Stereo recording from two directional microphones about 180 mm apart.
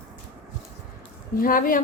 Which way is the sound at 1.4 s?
50° left (ahead or behind).